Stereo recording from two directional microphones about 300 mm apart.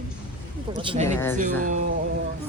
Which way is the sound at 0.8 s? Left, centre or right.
Centre.